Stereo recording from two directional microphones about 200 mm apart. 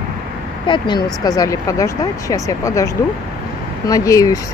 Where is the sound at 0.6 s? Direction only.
25° left (ahead or behind).